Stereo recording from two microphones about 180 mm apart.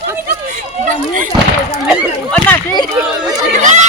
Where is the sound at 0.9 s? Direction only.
45° right (ahead or behind).